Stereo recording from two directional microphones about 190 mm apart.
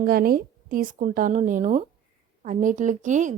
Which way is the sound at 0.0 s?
50° right (ahead or behind).